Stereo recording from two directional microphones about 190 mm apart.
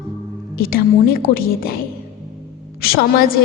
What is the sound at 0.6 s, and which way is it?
Speech, 50° left (ahead or behind).